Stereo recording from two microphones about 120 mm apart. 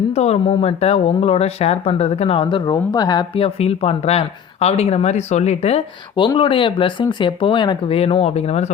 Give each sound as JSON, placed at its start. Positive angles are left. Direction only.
{"t": 0.1, "sound": "speech", "side_deg": 60}
{"t": 3.3, "sound": "speech", "side_deg": 55}
{"t": 6.1, "sound": "speech", "side_deg": 45}